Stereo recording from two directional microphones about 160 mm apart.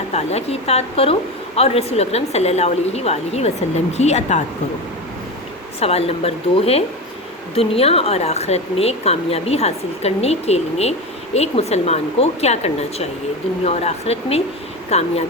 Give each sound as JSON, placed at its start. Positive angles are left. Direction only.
{"t": 0.1, "sound": "a woman's voice", "side_deg": 40}
{"t": 5.8, "sound": "speech", "side_deg": 40}